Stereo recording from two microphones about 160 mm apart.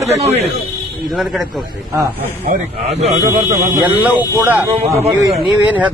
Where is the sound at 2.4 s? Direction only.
40° right (ahead or behind).